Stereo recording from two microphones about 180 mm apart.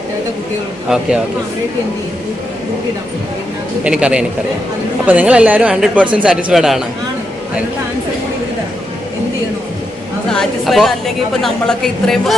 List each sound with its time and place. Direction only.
3.8 s a woman's voice: 5° right (ahead or behind)
10.3 s a woman's voice: centre (ahead or behind)